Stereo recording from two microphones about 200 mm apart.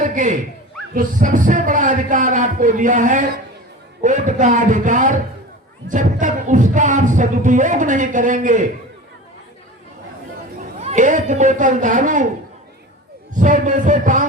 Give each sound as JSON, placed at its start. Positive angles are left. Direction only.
{"t": 0.0, "sound": "a sound", "side_deg": -40}
{"t": 0.9, "sound": "music", "side_deg": -40}
{"t": 10.8, "sound": "music", "side_deg": -35}
{"t": 13.3, "sound": "music", "side_deg": -40}